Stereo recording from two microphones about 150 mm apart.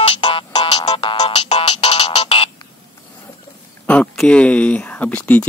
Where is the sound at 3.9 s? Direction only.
5° left (ahead or behind).